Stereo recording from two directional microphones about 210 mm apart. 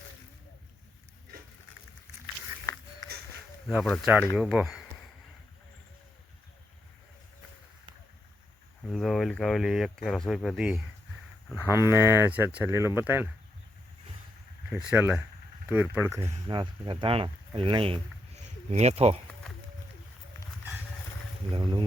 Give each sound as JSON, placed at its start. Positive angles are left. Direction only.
{"t": 3.7, "sound": "speech", "side_deg": 0}
{"t": 8.9, "sound": "speech", "side_deg": 0}
{"t": 11.4, "sound": "speech", "side_deg": 10}
{"t": 12.0, "sound": "speech", "side_deg": -10}
{"t": 14.7, "sound": "speech", "side_deg": -5}
{"t": 21.5, "sound": "speech", "side_deg": -25}